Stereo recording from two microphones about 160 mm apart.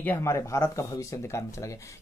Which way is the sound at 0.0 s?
15° left (ahead or behind).